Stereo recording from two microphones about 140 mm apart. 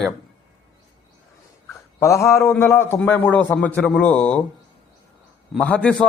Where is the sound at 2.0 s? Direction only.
20° left (ahead or behind).